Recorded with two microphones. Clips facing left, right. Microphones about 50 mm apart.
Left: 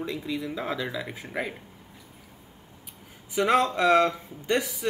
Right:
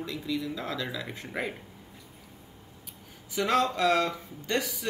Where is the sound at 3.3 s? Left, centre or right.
Left.